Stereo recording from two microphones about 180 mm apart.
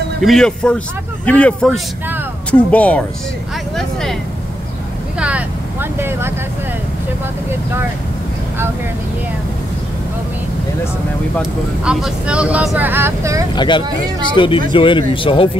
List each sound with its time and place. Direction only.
0.2 s a man's voice: centre (ahead or behind)
5.2 s vehicle: 10° right (ahead or behind)
11.8 s speech: 5° right (ahead or behind)
13.6 s speech: 25° left (ahead or behind)